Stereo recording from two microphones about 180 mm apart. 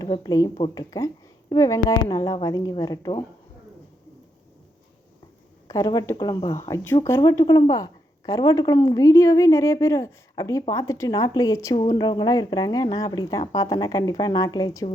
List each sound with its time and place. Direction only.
0.0 s speech: 20° left (ahead or behind)
5.6 s a woman's voice: 20° left (ahead or behind)